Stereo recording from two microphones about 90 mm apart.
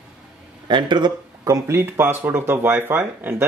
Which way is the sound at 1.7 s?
30° right (ahead or behind).